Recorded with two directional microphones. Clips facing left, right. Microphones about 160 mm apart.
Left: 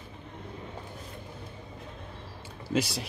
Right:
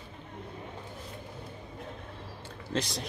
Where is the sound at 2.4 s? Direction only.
10° left (ahead or behind).